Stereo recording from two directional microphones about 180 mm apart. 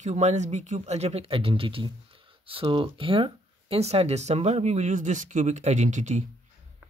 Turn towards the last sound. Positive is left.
turn(degrees=-40)  # may be behind; listen again after turning